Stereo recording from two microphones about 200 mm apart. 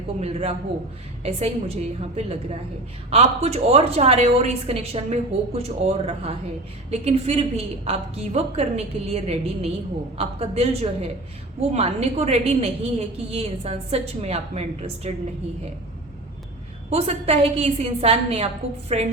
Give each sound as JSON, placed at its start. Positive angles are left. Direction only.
{"t": 0.2, "sound": "a woman's voice", "side_deg": -30}
{"t": 16.9, "sound": "a woman's voice", "side_deg": -30}